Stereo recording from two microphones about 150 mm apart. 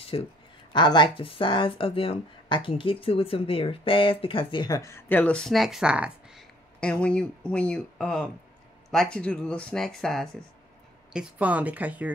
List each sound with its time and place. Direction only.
0.1 s speech: 35° left (ahead or behind); by 6.4 s 5° right (ahead or behind)
6.8 s speech: 5° left (ahead or behind)
11.1 s speech: 10° right (ahead or behind)